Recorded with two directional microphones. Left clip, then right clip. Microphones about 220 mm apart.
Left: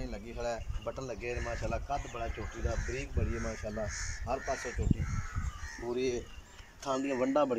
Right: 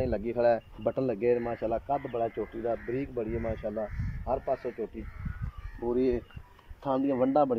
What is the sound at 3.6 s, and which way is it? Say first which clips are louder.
Speech: right 6 dB; 25° right (ahead or behind).